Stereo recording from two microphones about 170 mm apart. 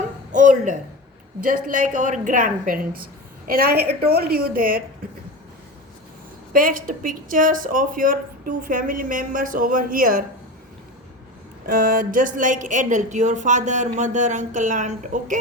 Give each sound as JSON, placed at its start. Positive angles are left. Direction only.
{"t": 0.3, "sound": "a sound", "side_deg": -45}
{"t": 1.4, "sound": "a woman's voice", "side_deg": -55}
{"t": 6.5, "sound": "speech", "side_deg": -55}
{"t": 11.6, "sound": "speech", "side_deg": -55}